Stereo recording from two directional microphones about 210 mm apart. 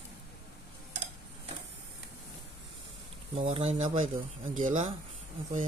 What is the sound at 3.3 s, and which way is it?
Speech, 30° right (ahead or behind).